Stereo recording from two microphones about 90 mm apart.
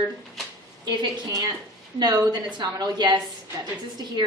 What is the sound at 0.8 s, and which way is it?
A woman's voice, 50° right (ahead or behind).